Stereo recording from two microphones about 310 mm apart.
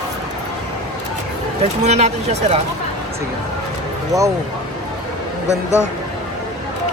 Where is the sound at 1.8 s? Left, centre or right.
Right.